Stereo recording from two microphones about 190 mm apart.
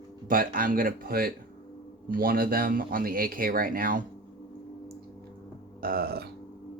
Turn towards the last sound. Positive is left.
turn(degrees=-55)  # may be behind; listen again after turning